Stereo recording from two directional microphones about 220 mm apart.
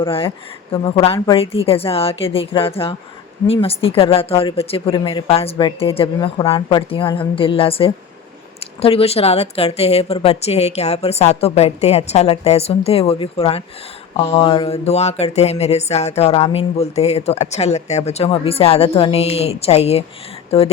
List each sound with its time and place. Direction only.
0.0 s speech: 25° left (ahead or behind)